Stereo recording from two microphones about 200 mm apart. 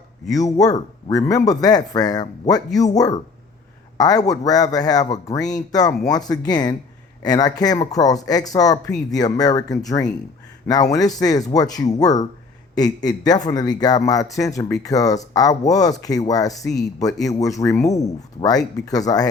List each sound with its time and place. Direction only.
0.3 s speech: 15° left (ahead or behind)